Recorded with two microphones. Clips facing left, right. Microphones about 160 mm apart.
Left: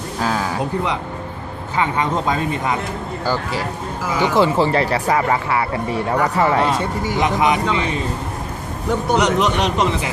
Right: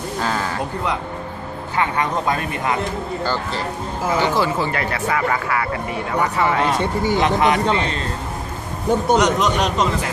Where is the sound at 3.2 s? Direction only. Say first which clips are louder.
Left 4 dB; 10° left (ahead or behind); by 6.6 s 35° left (ahead or behind).